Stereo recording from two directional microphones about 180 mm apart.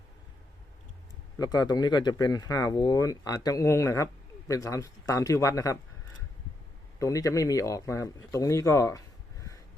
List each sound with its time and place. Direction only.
1.4 s speech: 20° left (ahead or behind)
7.0 s speech: 15° left (ahead or behind)